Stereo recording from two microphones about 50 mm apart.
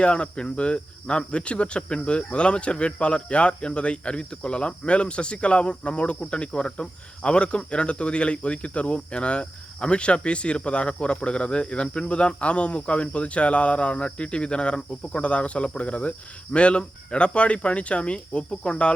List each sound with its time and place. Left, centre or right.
0.0 s cricket: centre